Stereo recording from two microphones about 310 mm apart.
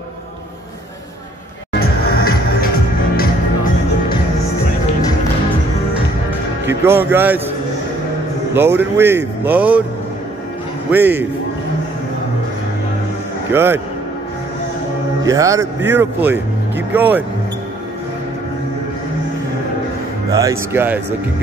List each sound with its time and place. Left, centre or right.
1.8 s music: left
6.8 s speech: centre
8.5 s speech: centre
10.9 s speech: centre
13.5 s speech: centre
15.2 s speech: centre
20.2 s speech: centre